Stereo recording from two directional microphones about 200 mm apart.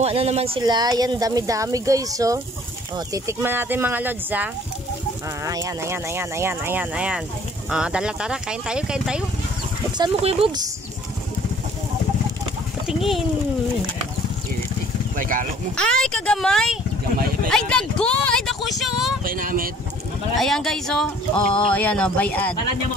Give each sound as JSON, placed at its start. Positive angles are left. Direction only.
{"t": 0.0, "sound": "speech", "side_deg": -30}
{"t": 9.9, "sound": "speech", "side_deg": -25}
{"t": 12.8, "sound": "speech", "side_deg": 0}
{"t": 15.1, "sound": "speech", "side_deg": -45}
{"t": 15.7, "sound": "speech", "side_deg": 5}
{"t": 19.2, "sound": "speech", "side_deg": -45}
{"t": 20.3, "sound": "speech", "side_deg": 0}